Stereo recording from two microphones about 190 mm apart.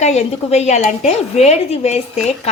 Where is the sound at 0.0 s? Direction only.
35° left (ahead or behind).